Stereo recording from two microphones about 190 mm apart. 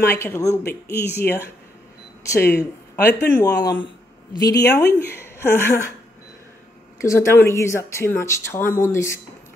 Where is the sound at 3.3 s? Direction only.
20° left (ahead or behind).